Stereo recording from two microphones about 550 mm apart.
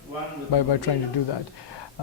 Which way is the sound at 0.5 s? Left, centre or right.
Left.